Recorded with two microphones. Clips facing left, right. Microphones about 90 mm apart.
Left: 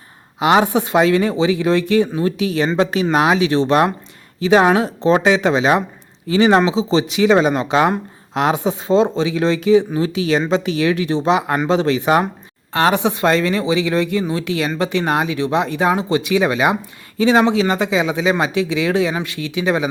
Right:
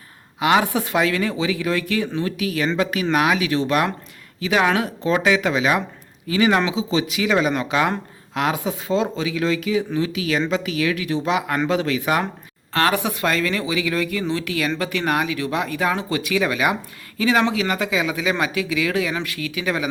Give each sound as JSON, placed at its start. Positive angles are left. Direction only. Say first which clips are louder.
{"t": 0.3, "sound": "speech", "louder": "left 4 dB", "side_deg": 20}